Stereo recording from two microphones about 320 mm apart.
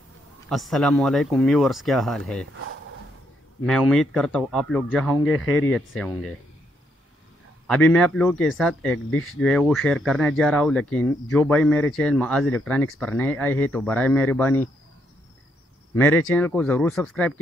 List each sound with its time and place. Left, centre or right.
0.5 s speech: centre
3.6 s speech: centre
7.6 s speech: centre
9.1 s speech: left
9.4 s speech: centre
15.9 s speech: centre